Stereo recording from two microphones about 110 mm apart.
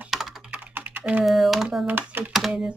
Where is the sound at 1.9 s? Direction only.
15° right (ahead or behind).